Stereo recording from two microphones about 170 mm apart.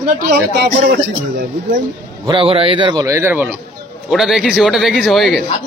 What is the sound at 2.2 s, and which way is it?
A man's voice, 30° right (ahead or behind).